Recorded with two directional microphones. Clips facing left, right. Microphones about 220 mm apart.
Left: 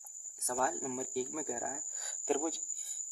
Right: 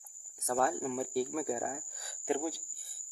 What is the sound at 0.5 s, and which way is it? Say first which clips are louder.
Speech: right 4 dB; 45° right (ahead or behind).